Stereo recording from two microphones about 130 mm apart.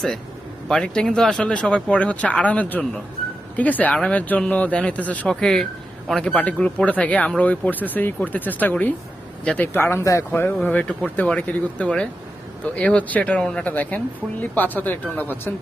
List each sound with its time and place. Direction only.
0.7 s speech: 5° left (ahead or behind)